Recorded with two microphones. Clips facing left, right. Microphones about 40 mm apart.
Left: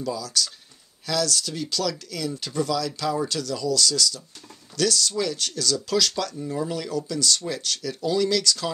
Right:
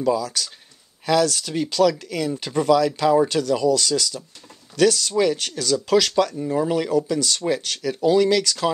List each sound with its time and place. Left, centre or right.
0.0 s speech: centre
6.3 s speech: right